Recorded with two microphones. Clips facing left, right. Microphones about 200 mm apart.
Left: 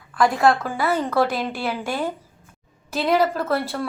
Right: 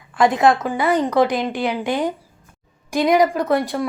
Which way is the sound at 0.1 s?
20° right (ahead or behind).